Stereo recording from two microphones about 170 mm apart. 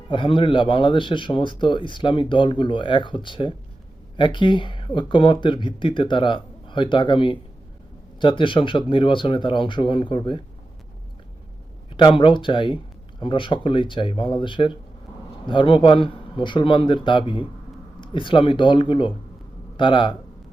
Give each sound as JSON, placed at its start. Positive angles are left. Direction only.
{"t": 0.1, "sound": "speech", "side_deg": 30}
{"t": 11.9, "sound": "speech", "side_deg": 30}